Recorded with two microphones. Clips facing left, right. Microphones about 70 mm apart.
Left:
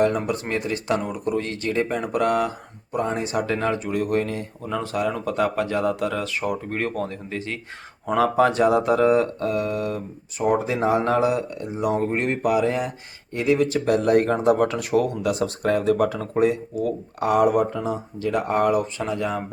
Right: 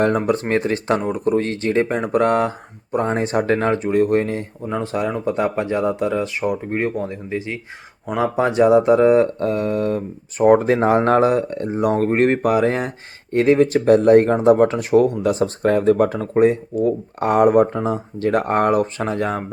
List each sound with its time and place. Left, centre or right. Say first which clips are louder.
0.0 s speech: right 4 dB; right